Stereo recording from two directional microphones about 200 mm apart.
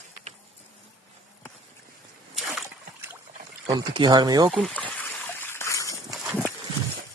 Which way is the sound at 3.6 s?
20° right (ahead or behind).